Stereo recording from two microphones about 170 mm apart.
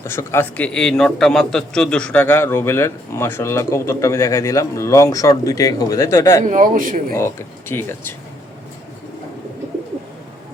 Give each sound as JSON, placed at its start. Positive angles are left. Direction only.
{"t": 0.0, "sound": "a man's voice", "side_deg": 15}
{"t": 6.4, "sound": "a man's voice", "side_deg": -50}
{"t": 7.1, "sound": "a man's voice", "side_deg": 15}